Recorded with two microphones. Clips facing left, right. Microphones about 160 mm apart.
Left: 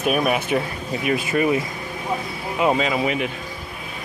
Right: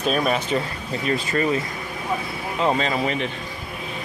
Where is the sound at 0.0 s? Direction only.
10° left (ahead or behind).